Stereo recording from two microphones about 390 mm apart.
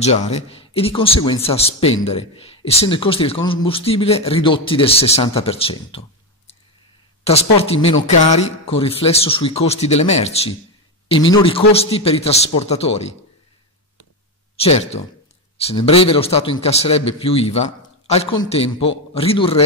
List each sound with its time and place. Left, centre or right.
0.0 s a man's voice: centre
14.6 s a man's voice: centre